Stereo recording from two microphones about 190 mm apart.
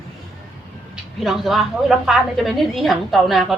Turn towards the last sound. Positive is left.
turn(degrees=0)  # may be behind; listen again after turning